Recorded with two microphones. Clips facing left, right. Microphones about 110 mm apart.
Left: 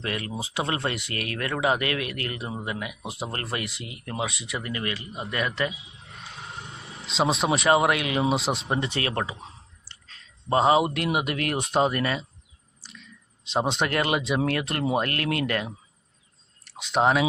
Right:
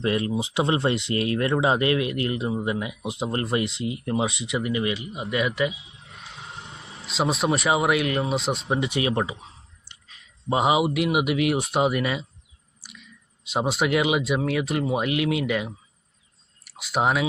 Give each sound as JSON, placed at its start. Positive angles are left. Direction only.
{"t": 0.0, "sound": "speech", "side_deg": -25}
{"t": 7.1, "sound": "speech", "side_deg": 0}
{"t": 12.8, "sound": "a sound", "side_deg": -10}
{"t": 13.5, "sound": "speech", "side_deg": -5}